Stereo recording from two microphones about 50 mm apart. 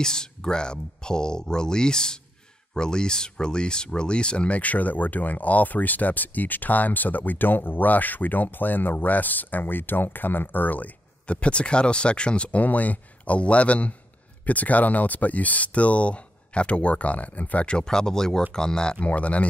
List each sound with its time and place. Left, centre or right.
0.0 s speech: centre; by 10.9 s left
11.2 s speech: left
19.0 s speech: left